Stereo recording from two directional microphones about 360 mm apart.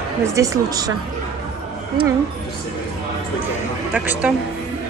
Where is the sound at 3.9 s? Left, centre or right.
Centre.